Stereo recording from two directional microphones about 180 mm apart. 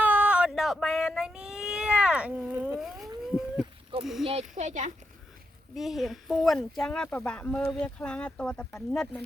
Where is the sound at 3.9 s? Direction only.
30° right (ahead or behind).